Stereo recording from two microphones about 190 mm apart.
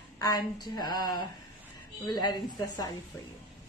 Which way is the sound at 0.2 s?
20° left (ahead or behind).